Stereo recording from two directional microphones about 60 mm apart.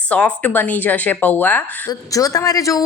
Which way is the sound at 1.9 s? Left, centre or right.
Left.